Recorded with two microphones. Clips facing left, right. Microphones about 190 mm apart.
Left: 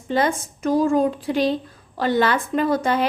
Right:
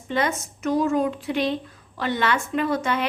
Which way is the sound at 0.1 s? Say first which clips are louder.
Left 4 dB; 35° left (ahead or behind).